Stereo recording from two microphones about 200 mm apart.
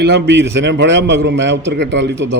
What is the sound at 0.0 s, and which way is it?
A man's voice, 60° right (ahead or behind).